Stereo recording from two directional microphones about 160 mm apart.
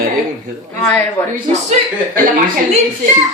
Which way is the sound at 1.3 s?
50° right (ahead or behind).